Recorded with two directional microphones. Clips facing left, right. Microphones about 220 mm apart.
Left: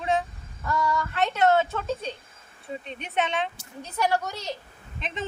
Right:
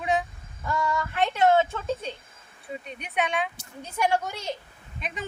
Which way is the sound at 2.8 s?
10° right (ahead or behind).